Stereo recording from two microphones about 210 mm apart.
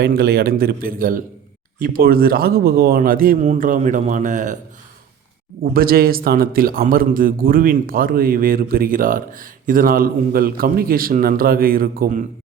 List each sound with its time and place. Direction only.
0.0 s a man's voice: 50° right (ahead or behind)
5.7 s a man's voice: 45° right (ahead or behind)